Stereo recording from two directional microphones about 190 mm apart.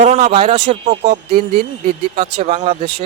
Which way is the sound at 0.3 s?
30° right (ahead or behind).